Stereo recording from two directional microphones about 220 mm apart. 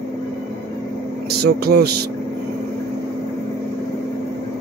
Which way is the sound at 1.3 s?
45° right (ahead or behind).